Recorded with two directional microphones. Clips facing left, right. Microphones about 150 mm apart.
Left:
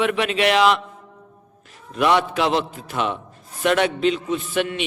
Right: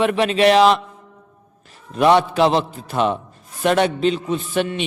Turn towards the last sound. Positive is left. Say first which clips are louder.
# right 2 dB
turn(degrees=-35)  # may be behind; listen again after turning